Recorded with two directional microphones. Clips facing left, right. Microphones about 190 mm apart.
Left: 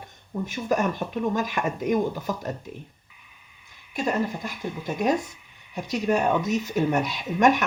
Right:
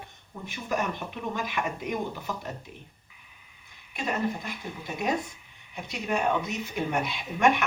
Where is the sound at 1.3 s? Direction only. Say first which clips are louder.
Left 5 dB; 45° left (ahead or behind).